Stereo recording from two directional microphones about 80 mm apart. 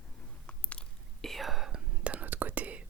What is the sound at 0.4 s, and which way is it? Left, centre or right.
Whispering, centre.